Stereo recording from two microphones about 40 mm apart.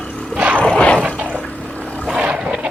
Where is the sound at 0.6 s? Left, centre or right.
Left.